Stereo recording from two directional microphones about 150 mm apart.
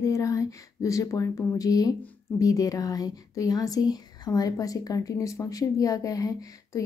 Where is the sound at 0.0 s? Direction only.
20° left (ahead or behind).